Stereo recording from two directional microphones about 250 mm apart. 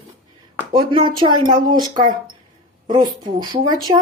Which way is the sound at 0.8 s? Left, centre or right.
Centre.